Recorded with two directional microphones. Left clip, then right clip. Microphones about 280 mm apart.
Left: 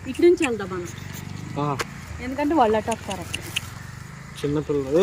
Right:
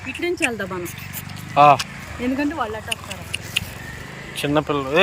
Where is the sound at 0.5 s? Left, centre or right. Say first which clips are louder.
Right 2 dB; right.